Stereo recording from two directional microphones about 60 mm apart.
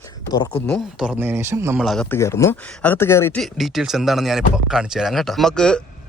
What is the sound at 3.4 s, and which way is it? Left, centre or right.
Speech, centre.